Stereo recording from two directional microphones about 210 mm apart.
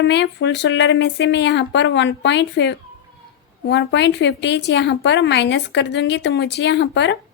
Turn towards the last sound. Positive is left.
turn(degrees=55)  # may be behind; listen again after turning